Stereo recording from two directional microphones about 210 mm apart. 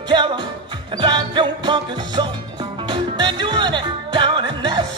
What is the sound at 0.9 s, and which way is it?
Music, 20° right (ahead or behind).